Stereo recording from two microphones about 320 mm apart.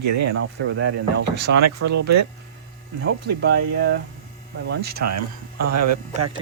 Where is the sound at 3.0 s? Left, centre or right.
Right.